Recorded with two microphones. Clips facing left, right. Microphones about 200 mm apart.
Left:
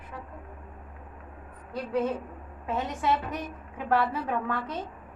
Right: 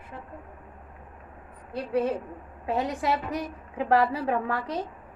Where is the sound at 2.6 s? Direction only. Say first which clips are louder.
Right 2 dB; 35° right (ahead or behind).